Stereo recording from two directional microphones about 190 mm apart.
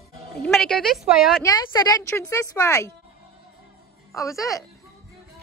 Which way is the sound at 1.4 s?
20° left (ahead or behind).